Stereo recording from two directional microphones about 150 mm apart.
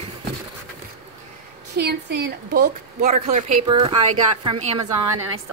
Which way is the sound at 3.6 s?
35° right (ahead or behind).